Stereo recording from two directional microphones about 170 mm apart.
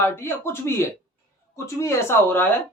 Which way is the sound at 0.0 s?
15° left (ahead or behind).